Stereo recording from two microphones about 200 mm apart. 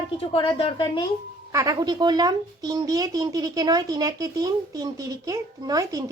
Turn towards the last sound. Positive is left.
turn(degrees=-20)  # may be behind; listen again after turning